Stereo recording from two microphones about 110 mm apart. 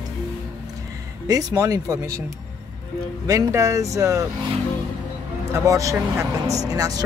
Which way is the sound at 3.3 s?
30° right (ahead or behind).